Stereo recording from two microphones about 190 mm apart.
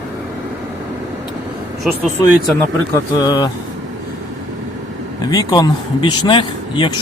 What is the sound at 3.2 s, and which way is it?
Speech, 20° left (ahead or behind).